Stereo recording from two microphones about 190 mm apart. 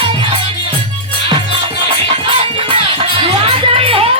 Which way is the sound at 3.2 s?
30° right (ahead or behind).